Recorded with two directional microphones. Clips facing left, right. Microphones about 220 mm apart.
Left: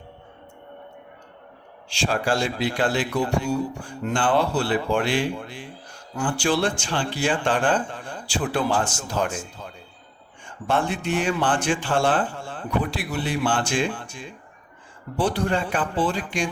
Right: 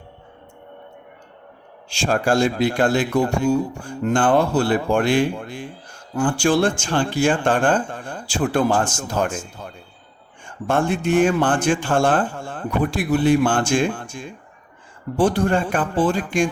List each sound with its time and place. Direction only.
1.9 s speech: 45° right (ahead or behind)